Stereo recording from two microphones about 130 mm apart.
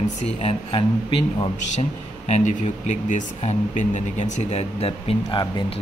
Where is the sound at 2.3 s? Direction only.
65° left (ahead or behind).